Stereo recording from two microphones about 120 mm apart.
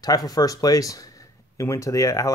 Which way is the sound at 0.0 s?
30° left (ahead or behind).